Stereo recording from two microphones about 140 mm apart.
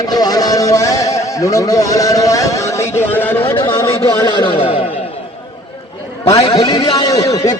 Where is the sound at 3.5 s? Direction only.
35° left (ahead or behind).